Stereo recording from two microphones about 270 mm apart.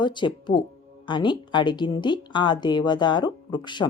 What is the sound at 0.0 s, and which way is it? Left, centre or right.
A woman's voice, centre.